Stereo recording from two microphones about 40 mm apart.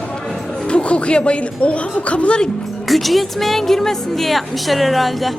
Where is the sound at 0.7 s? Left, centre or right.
Left.